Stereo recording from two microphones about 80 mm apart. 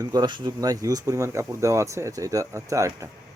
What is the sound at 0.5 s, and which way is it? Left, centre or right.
Speech, right.